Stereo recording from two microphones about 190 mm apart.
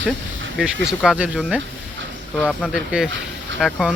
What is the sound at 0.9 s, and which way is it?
Speech, 5° right (ahead or behind).